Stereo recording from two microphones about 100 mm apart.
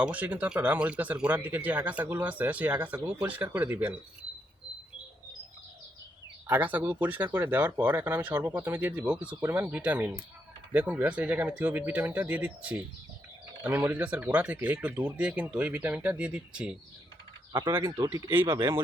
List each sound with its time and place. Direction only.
0.0 s speech: 15° right (ahead or behind)
6.5 s speech: 15° right (ahead or behind)
17.8 s speech: 40° right (ahead or behind)
18.1 s speech: 25° right (ahead or behind)